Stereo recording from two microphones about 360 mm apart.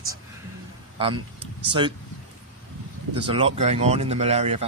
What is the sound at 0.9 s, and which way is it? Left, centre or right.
Speech, centre.